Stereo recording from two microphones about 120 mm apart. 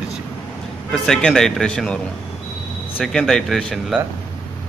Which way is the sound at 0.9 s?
5° left (ahead or behind).